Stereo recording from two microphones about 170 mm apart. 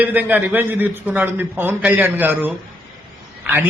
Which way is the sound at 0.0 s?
10° right (ahead or behind).